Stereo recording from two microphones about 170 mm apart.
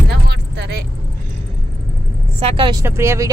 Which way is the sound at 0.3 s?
75° right (ahead or behind).